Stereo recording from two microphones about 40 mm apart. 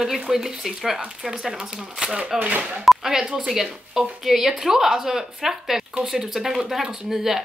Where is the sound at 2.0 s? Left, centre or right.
Right.